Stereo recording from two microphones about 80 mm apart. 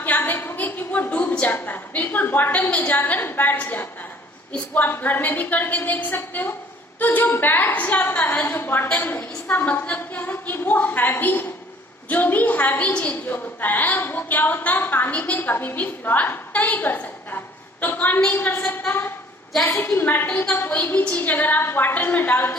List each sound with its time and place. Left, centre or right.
0.0 s a sound: left
4.5 s a woman's voice: left
19.9 s a woman's voice: left